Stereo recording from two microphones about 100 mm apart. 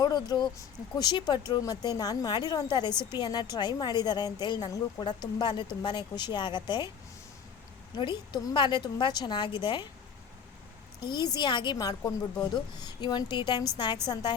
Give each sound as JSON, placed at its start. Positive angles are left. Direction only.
{"t": 0.0, "sound": "a woman's voice", "side_deg": 45}
{"t": 7.9, "sound": "a woman's voice", "side_deg": 50}
{"t": 11.1, "sound": "a woman's voice", "side_deg": 45}